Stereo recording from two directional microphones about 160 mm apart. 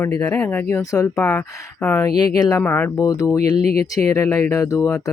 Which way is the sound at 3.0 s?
20° left (ahead or behind).